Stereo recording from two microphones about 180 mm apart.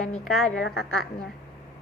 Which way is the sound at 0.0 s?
Centre (ahead or behind).